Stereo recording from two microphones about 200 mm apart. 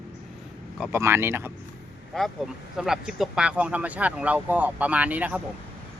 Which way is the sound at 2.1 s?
Centre (ahead or behind).